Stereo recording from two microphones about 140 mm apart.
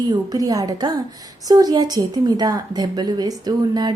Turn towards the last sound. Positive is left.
turn(degrees=-30)  # may be behind; listen again after turning